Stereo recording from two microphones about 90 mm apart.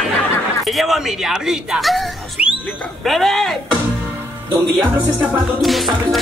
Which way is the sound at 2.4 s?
15° right (ahead or behind).